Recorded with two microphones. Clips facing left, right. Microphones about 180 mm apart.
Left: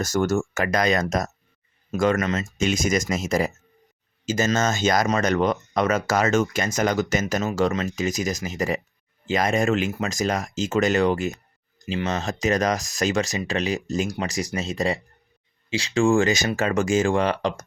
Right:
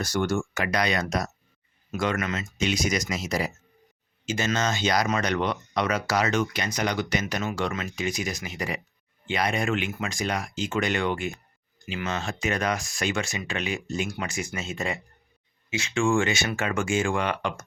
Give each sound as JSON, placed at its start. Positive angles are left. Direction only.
{"t": 0.0, "sound": "speech", "side_deg": 45}